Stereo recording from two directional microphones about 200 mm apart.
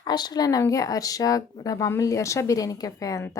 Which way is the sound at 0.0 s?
20° left (ahead or behind).